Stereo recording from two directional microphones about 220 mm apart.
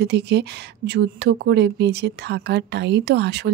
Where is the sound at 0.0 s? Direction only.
50° right (ahead or behind).